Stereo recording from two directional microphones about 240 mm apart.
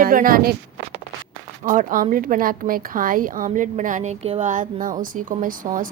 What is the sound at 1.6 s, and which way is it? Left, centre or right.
A woman's voice, right.